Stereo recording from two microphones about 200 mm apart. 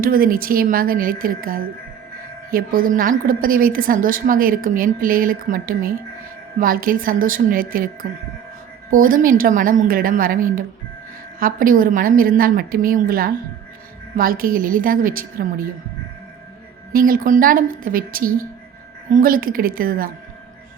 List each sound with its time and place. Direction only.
0.0 s a woman's voice: 45° right (ahead or behind)
16.9 s a woman's voice: 45° right (ahead or behind)